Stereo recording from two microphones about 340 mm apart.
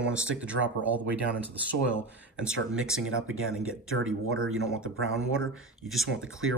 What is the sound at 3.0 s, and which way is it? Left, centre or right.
Speech, right.